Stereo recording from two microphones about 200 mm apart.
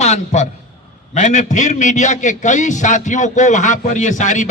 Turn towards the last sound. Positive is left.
turn(degrees=40)  # may be behind; listen again after turning